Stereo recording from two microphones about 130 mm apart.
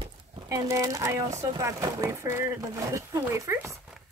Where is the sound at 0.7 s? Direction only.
25° right (ahead or behind).